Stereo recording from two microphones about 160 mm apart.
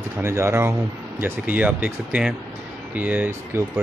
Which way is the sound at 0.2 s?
15° right (ahead or behind).